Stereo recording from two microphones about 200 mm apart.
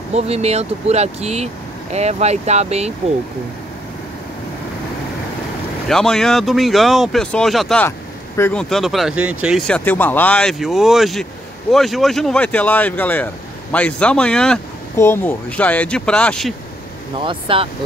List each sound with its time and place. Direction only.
0.1 s speech: 30° right (ahead or behind)
5.9 s speech: centre (ahead or behind)
17.2 s speech: 25° right (ahead or behind)